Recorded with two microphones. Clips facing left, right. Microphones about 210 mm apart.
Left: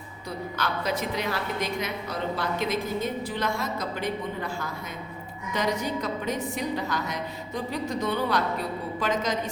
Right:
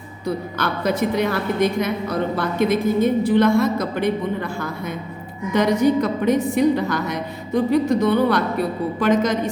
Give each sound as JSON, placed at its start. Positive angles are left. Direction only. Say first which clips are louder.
{"t": 0.3, "sound": "a woman's voice", "louder": "right 7 dB", "side_deg": -60}
{"t": 5.5, "sound": "a woman's voice", "louder": "right 11 dB", "side_deg": -65}